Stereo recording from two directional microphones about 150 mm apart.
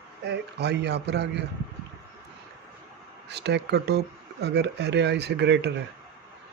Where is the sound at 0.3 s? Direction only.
90° right.